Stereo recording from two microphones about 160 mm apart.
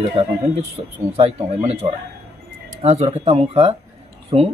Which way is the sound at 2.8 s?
40° right (ahead or behind).